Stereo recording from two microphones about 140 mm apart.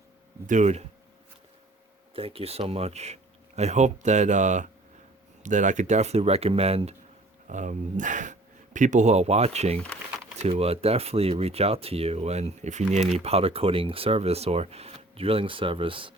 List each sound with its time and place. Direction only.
0.4 s speech: 60° right (ahead or behind)
2.1 s speech: 40° right (ahead or behind)
7.4 s speech: 60° right (ahead or behind)
9.7 s speech: 5° left (ahead or behind)
10.3 s speech: 50° right (ahead or behind)